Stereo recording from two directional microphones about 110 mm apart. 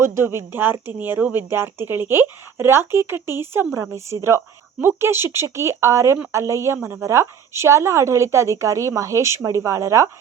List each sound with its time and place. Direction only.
0.0 s speech: 25° right (ahead or behind)